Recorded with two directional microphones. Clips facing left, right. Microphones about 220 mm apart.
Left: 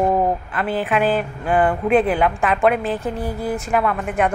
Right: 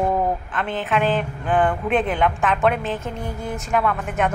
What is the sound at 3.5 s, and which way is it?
Speech, centre (ahead or behind).